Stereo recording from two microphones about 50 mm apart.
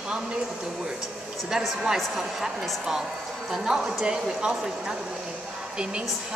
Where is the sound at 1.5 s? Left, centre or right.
Centre.